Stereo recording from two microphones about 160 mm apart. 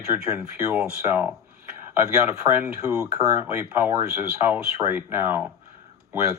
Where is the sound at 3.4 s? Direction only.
15° right (ahead or behind).